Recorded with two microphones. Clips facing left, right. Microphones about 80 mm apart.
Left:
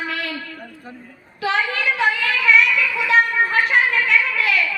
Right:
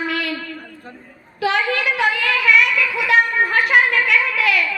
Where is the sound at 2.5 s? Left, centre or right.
Right.